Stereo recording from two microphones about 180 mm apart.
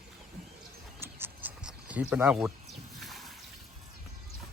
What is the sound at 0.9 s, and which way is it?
Cricket, 10° right (ahead or behind).